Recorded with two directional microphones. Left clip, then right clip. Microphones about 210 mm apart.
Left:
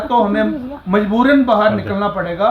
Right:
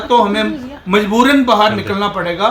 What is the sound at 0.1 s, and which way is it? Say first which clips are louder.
Speech: right 3 dB; 10° right (ahead or behind).